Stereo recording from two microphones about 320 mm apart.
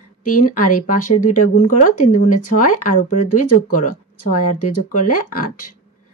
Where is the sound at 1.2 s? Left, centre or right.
Left.